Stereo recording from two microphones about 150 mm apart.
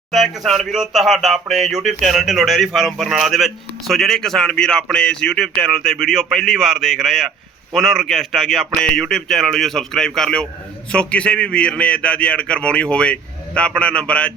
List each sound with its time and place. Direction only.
0.1 s a man's voice: centre (ahead or behind)